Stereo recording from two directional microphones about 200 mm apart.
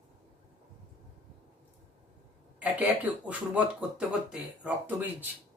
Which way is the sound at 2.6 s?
5° right (ahead or behind).